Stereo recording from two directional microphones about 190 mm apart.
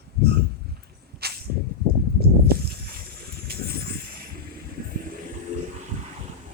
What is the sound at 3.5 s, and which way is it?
Vehicle, 55° right (ahead or behind).